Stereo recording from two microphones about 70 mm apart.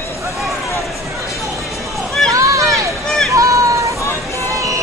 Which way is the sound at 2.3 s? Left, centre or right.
Right.